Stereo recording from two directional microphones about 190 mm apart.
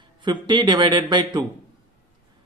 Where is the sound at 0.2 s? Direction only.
25° right (ahead or behind).